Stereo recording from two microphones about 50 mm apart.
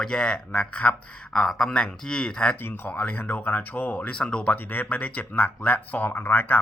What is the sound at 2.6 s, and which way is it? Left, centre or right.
Speech, left.